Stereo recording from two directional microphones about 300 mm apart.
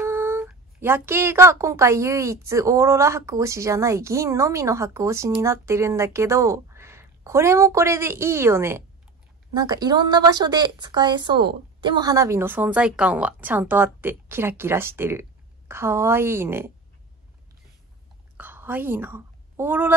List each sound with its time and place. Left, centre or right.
0.0 s a woman's voice: centre
18.4 s a woman's voice: centre